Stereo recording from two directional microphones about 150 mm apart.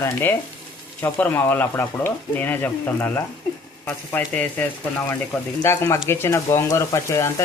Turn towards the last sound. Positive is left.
turn(degrees=20)  # may be behind; listen again after turning